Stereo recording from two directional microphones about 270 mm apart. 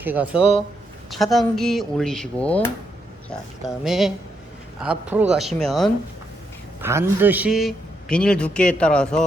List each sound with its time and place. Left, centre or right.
0.0 s a man's voice: centre